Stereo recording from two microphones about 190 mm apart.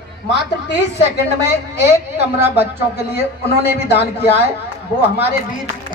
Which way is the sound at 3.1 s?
60° left (ahead or behind).